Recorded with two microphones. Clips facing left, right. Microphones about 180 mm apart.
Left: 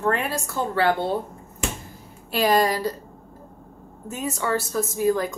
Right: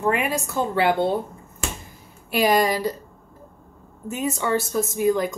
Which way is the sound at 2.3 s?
15° right (ahead or behind).